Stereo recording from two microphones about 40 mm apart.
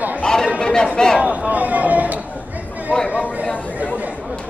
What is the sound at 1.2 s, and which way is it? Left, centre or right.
Speech, right.